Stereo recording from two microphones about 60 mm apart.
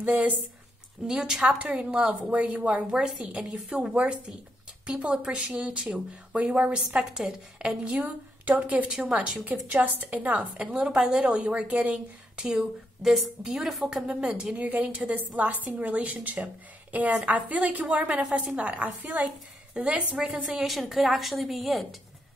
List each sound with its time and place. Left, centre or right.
0.0 s speech: right
1.0 s a woman's voice: centre
2.9 s speech: centre
3.2 s a woman's voice: right
7.8 s a woman's voice: right
12.4 s speech: centre
14.6 s a woman's voice: right
20.9 s a woman's voice: centre